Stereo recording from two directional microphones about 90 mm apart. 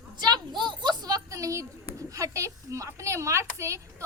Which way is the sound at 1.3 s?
35° right (ahead or behind).